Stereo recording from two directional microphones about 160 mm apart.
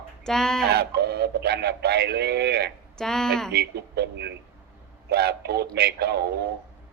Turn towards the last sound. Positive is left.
turn(degrees=-90)